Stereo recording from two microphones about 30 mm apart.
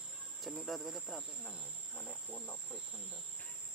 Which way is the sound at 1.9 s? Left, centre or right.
Left.